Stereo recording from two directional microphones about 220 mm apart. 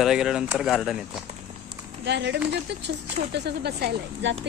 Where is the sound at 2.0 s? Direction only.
50° right (ahead or behind).